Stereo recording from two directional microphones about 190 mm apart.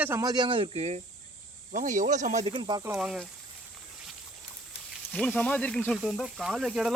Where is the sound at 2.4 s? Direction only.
25° right (ahead or behind).